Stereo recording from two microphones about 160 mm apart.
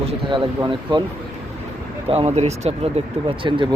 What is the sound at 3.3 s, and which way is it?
Speech, 30° right (ahead or behind).